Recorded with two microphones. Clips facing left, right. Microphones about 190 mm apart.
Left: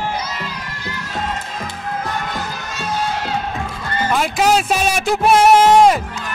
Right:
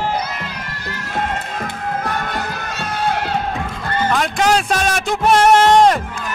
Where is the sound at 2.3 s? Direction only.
60° right (ahead or behind).